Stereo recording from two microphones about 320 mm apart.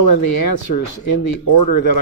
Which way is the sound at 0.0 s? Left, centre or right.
Left.